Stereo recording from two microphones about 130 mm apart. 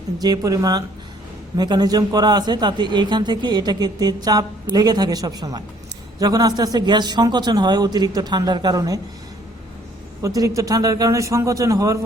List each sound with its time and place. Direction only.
0.2 s a man's voice: 30° right (ahead or behind)
10.2 s a man's voice: 25° right (ahead or behind)